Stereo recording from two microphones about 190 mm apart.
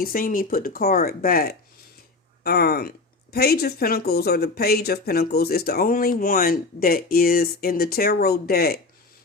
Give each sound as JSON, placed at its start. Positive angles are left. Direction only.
{"t": 0.0, "sound": "speech", "side_deg": 50}